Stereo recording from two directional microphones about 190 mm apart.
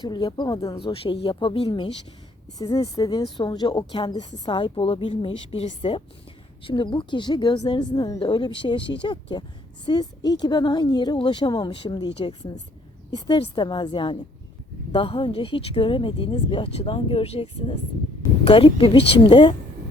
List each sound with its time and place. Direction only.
0.0 s speech: 25° left (ahead or behind)
2.6 s speech: 20° left (ahead or behind)